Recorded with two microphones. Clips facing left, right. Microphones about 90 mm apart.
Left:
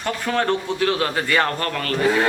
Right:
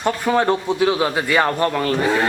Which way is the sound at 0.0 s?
15° right (ahead or behind).